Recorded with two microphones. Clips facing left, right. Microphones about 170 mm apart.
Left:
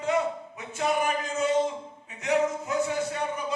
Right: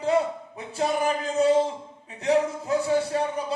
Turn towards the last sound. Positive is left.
turn(degrees=-30)  # may be behind; listen again after turning